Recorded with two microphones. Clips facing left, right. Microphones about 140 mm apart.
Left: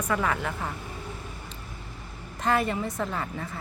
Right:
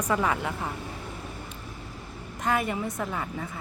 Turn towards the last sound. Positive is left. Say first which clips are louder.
# left 1 dB
turn(degrees=-5)  # may be behind; listen again after turning